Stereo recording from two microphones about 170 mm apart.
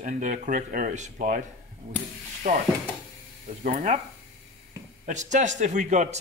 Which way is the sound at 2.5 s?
50° right (ahead or behind).